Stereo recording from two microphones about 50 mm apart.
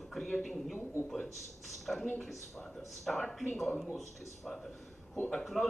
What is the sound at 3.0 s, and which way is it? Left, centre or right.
Speech, centre.